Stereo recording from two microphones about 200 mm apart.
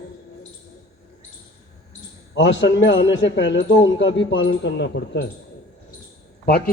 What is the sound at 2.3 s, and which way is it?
A man's voice, 65° left (ahead or behind).